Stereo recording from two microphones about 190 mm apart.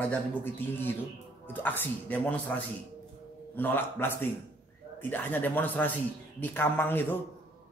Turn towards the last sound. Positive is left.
turn(degrees=10)  # may be behind; listen again after turning